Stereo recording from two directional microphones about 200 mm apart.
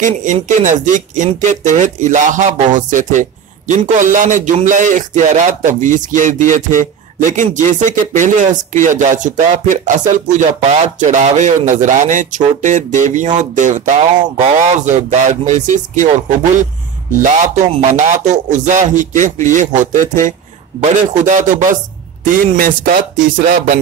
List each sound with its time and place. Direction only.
0.0 s a man's voice: 40° right (ahead or behind)
17.2 s a man's voice: 35° right (ahead or behind)